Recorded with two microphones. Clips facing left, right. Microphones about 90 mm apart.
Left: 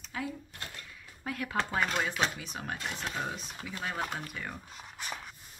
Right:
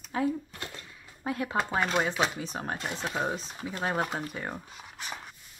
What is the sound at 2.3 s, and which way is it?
Speech, 35° right (ahead or behind).